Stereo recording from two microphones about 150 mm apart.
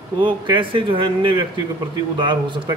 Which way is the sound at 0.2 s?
35° right (ahead or behind).